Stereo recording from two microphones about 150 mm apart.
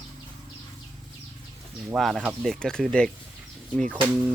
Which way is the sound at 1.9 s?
Centre (ahead or behind).